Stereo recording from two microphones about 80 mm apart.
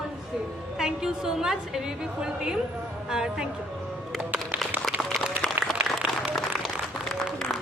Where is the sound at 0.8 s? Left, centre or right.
Centre.